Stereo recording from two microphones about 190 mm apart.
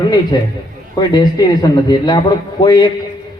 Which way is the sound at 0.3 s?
20° left (ahead or behind).